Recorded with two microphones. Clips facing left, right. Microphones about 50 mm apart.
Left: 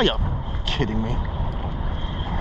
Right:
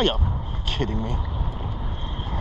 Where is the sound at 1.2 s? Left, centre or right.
Centre.